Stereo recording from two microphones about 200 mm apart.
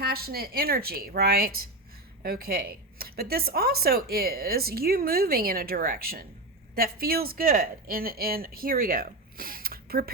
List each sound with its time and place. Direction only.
0.0 s speech: 50° right (ahead or behind)